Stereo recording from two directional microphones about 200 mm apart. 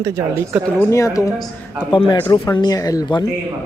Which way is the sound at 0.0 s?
15° right (ahead or behind).